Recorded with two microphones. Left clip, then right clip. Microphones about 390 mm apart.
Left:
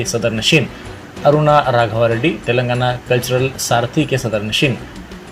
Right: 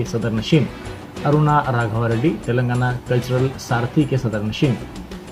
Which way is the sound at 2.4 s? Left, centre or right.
Left.